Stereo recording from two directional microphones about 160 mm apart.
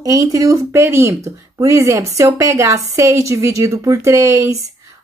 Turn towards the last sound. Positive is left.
turn(degrees=-20)  # may be behind; listen again after turning